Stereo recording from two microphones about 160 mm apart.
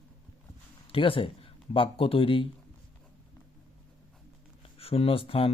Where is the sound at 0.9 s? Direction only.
35° left (ahead or behind).